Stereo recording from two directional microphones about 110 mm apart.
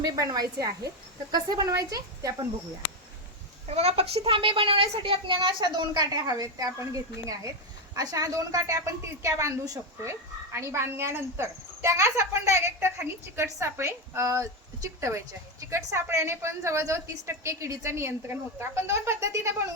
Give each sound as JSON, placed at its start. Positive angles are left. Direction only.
{"t": 0.0, "sound": "a woman's voice", "side_deg": -35}
{"t": 3.7, "sound": "a woman's voice", "side_deg": -70}